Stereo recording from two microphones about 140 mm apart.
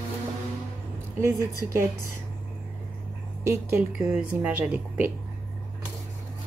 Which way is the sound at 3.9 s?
5° right (ahead or behind).